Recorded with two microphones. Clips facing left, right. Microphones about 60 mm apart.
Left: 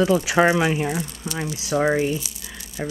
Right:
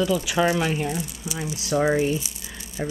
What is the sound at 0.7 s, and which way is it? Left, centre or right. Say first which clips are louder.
Speech: left 2 dB; centre.